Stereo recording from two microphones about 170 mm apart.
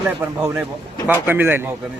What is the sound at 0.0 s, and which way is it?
Speech, 10° right (ahead or behind).